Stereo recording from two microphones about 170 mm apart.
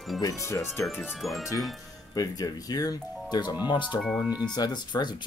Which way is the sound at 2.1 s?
20° left (ahead or behind).